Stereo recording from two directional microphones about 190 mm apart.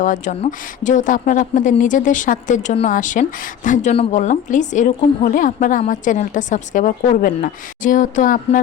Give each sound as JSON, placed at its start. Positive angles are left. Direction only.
{"t": 0.0, "sound": "speech", "side_deg": 40}